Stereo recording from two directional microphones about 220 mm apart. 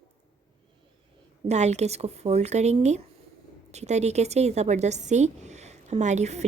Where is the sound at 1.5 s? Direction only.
30° right (ahead or behind).